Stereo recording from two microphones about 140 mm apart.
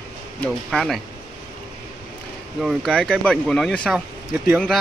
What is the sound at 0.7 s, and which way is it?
Speech, centre (ahead or behind).